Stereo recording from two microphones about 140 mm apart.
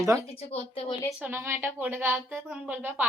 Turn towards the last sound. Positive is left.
turn(degrees=-10)  # may be behind; listen again after turning